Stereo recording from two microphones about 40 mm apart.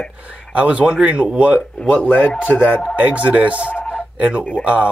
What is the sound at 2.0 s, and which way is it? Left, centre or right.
Speech, left.